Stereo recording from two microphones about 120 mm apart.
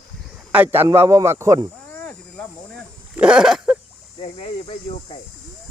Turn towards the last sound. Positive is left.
turn(degrees=55)  # may be behind; listen again after turning